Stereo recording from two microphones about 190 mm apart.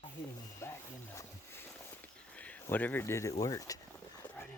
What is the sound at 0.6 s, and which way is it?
Speech, 15° left (ahead or behind).